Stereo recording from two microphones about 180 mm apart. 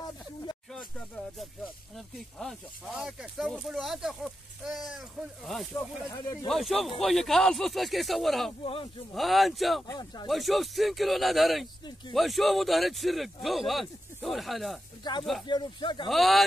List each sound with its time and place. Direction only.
0.7 s a sound: centre (ahead or behind)
2.0 s speech: centre (ahead or behind)
5.8 s speech: 15° left (ahead or behind)
6.4 s speech: centre (ahead or behind)
8.6 s speech: 30° left (ahead or behind)
9.1 s speech: centre (ahead or behind)
9.8 s speech: 25° left (ahead or behind)
10.2 s speech: centre (ahead or behind)
15.0 s speech: 25° left (ahead or behind)
16.1 s speech: centre (ahead or behind)